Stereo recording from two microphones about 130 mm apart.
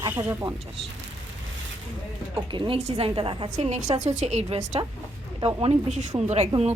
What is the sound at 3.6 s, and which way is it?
A woman's voice, 65° right (ahead or behind).